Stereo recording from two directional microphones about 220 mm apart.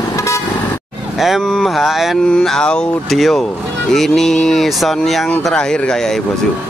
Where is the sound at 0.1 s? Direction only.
15° left (ahead or behind).